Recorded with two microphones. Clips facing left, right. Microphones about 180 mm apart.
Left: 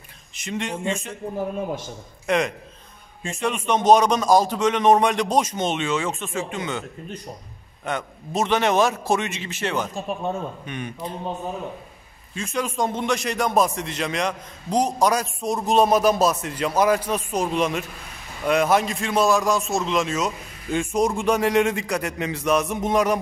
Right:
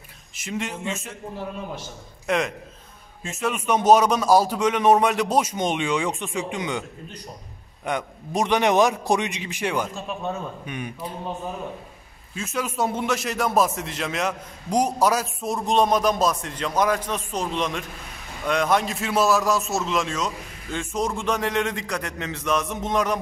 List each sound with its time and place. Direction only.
0.4 s a man's voice: 5° right (ahead or behind)
2.2 s a man's voice: centre (ahead or behind)
7.8 s a man's voice: 15° right (ahead or behind)
12.4 s a man's voice: 5° right (ahead or behind); by 23.1 s 10° left (ahead or behind)